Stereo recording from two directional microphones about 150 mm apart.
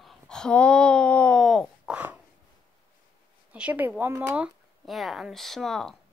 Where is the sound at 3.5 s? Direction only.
10° right (ahead or behind).